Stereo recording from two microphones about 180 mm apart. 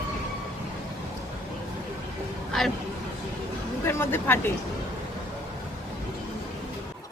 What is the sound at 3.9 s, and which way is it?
Speech, 10° left (ahead or behind).